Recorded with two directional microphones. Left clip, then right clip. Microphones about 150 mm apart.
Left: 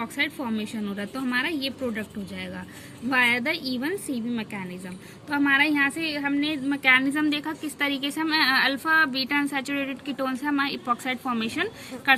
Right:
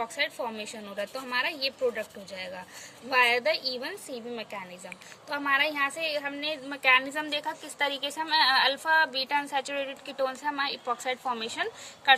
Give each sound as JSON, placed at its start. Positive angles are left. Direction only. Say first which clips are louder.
{"t": 0.0, "sound": "a woman's voice", "louder": "left 2 dB", "side_deg": -40}